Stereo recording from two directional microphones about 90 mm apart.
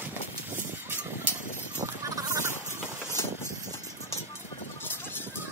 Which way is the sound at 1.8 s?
35° right (ahead or behind).